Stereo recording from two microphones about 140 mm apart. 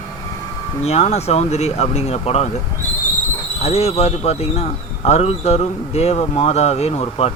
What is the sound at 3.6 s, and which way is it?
Speech, 50° left (ahead or behind).